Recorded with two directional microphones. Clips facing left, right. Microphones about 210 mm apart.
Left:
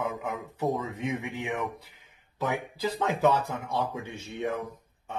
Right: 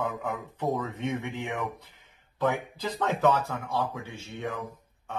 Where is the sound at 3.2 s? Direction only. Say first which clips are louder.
Even; 20° left (ahead or behind).